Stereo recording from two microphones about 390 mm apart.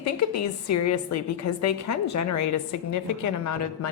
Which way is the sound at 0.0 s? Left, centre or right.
Left.